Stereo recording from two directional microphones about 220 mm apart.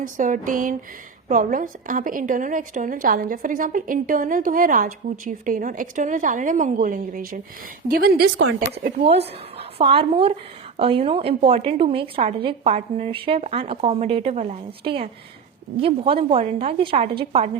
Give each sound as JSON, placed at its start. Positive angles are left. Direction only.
{"t": 0.0, "sound": "a woman's voice", "side_deg": -35}
{"t": 9.0, "sound": "a woman's voice", "side_deg": -25}